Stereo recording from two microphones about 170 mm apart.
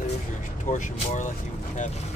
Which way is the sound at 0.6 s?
45° left (ahead or behind).